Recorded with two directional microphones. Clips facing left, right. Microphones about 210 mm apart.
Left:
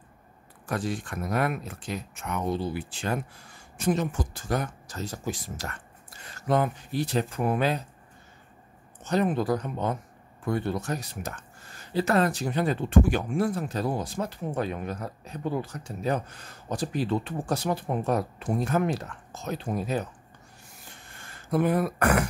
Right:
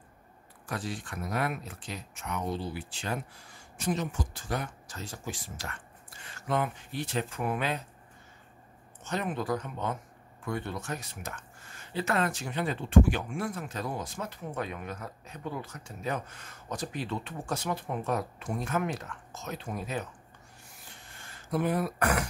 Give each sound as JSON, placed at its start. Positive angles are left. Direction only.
{"t": 0.7, "sound": "speech", "side_deg": 50}
{"t": 9.0, "sound": "speech", "side_deg": 35}
{"t": 21.5, "sound": "speech", "side_deg": 55}